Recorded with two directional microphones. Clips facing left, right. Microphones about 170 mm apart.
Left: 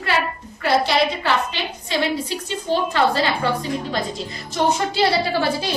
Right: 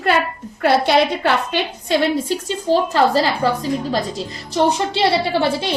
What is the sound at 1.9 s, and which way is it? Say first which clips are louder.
A woman's voice: right 5 dB; 45° right (ahead or behind).